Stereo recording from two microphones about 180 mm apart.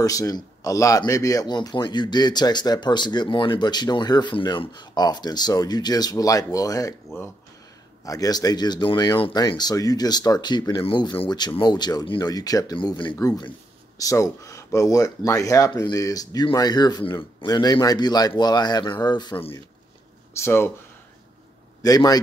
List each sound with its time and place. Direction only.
0.0 s speech: 20° left (ahead or behind)
8.0 s speech: 20° left (ahead or behind)
20.3 s speech: 15° left (ahead or behind)
21.8 s speech: 20° left (ahead or behind)